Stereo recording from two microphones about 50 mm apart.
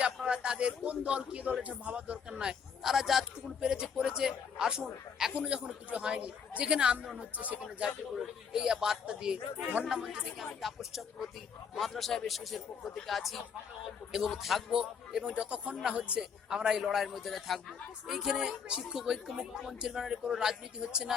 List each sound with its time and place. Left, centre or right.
0.0 s speech: centre
2.9 s a man's voice: centre
3.6 s a man's voice: centre
7.2 s speech: right
7.9 s a man's voice: centre
10.2 s a man's voice: centre
14.7 s a man's voice: centre